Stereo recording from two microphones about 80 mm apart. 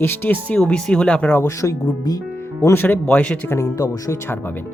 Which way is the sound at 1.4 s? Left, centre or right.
Left.